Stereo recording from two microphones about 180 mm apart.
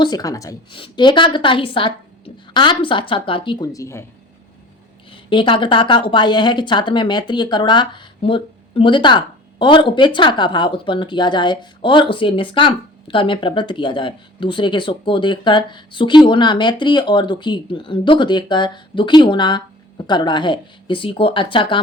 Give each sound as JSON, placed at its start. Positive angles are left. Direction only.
{"t": 0.0, "sound": "speech", "side_deg": 20}
{"t": 5.1, "sound": "speech", "side_deg": 25}